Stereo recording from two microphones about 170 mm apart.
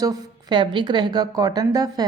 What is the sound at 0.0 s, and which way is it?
A woman's voice, 20° right (ahead or behind).